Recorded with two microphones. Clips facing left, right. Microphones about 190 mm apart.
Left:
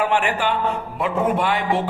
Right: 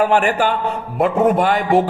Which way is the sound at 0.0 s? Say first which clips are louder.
Right 5 dB; 40° right (ahead or behind).